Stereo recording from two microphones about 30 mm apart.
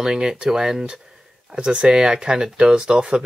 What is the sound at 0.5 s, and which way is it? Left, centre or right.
Speech, centre.